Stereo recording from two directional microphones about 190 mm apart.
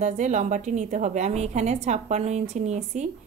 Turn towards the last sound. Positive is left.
turn(degrees=-35)  # may be behind; listen again after turning